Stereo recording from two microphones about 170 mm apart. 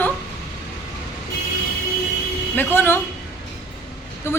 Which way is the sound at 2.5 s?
10° left (ahead or behind).